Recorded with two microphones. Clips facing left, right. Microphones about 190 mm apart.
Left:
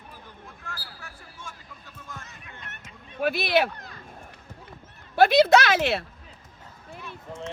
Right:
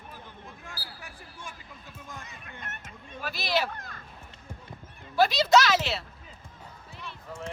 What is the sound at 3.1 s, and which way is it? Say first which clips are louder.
Speech: left 7 dB; 60° left (ahead or behind).